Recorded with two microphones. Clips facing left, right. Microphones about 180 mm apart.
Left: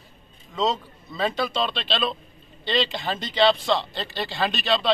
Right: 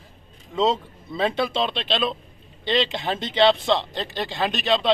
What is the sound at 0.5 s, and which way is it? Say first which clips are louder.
Speech: right 3 dB; 25° right (ahead or behind).